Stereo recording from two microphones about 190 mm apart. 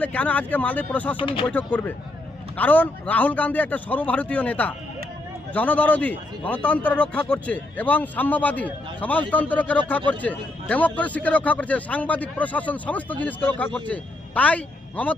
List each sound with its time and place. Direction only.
0.0 s a man's voice: 5° left (ahead or behind)
1.1 s speech: 25° left (ahead or behind)
1.5 s a man's voice: 10° left (ahead or behind)